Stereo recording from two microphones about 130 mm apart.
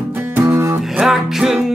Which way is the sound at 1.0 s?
5° right (ahead or behind).